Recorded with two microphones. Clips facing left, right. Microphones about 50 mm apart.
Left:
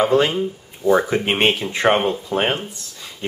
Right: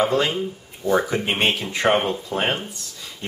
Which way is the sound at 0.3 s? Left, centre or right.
Centre.